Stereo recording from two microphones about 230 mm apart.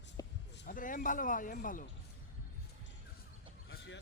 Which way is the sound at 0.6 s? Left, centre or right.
Left.